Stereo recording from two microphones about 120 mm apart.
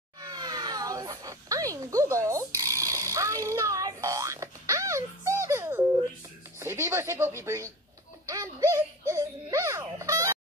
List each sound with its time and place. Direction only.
0.2 s a sound: 35° right (ahead or behind)
6.6 s speech: 20° right (ahead or behind)
8.3 s turkey: 30° right (ahead or behind)